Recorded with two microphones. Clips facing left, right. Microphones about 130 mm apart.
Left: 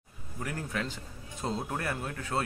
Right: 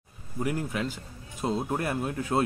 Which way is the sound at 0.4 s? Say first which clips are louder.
Right 6 dB; 15° right (ahead or behind).